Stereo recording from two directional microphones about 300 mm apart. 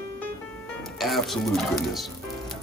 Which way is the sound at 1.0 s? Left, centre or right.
Centre.